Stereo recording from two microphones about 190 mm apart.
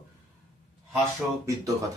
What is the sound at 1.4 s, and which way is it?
Speech, 15° right (ahead or behind).